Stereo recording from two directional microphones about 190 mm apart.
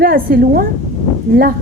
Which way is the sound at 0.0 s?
50° right (ahead or behind).